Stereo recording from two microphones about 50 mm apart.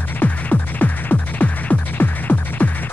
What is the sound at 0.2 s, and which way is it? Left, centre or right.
Music, left.